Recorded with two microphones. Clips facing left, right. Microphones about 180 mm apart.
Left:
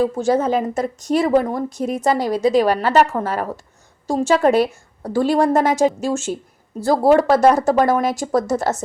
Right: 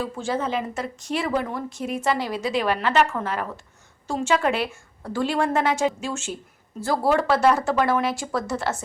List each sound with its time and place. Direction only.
0.0 s a woman's voice: 40° left (ahead or behind)